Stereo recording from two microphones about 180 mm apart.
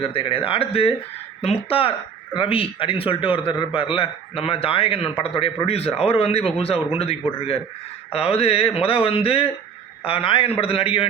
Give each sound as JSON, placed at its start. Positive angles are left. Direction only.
{"t": 0.0, "sound": "a man's voice", "side_deg": 30}
{"t": 2.3, "sound": "a man's voice", "side_deg": 30}